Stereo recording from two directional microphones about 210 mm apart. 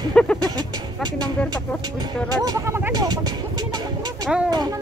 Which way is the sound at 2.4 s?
20° right (ahead or behind).